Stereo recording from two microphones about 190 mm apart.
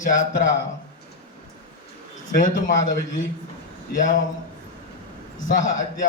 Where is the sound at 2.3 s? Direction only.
45° left (ahead or behind).